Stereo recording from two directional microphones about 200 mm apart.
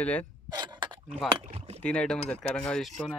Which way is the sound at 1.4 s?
30° right (ahead or behind).